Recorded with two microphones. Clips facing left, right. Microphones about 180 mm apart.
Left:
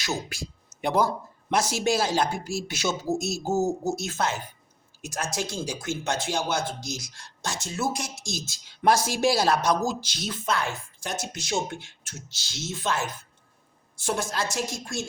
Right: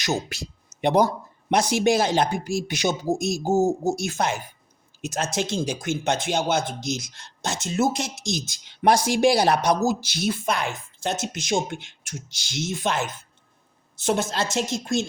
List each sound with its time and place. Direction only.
0.0 s speech: 20° right (ahead or behind)